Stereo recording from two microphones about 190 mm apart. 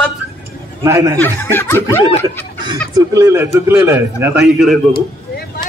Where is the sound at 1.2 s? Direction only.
10° left (ahead or behind).